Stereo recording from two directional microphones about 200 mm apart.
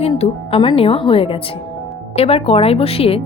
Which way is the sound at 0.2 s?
25° left (ahead or behind).